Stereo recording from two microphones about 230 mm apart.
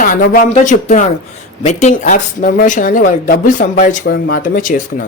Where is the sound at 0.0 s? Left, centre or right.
Left.